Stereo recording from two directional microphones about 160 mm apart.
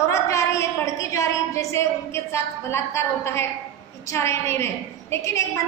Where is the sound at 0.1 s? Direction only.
20° left (ahead or behind).